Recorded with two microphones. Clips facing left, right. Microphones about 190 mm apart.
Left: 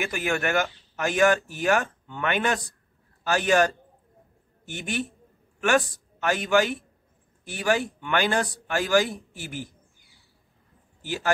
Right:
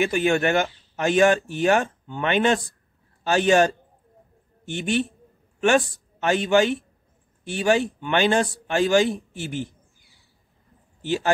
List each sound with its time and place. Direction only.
0.0 s a man's voice: 25° right (ahead or behind)
11.0 s speech: 25° right (ahead or behind)